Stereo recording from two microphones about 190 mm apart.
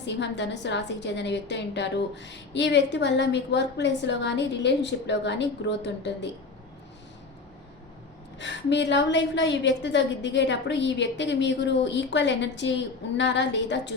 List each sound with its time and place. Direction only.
0.0 s a woman's voice: 65° left (ahead or behind)
8.4 s a woman's voice: 70° left (ahead or behind)